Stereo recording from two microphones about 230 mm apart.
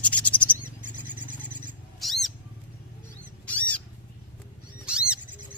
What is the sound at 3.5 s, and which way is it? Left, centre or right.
Bird, centre.